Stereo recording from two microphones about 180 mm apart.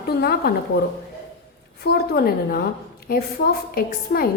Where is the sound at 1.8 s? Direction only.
60° left (ahead or behind).